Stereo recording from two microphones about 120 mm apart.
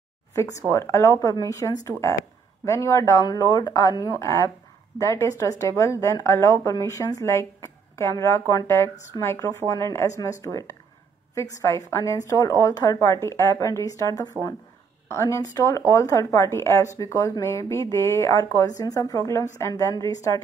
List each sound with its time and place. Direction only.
0.3 s speech: 25° left (ahead or behind)
11.3 s speech: 25° left (ahead or behind)